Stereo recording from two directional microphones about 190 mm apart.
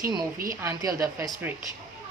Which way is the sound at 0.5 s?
15° right (ahead or behind).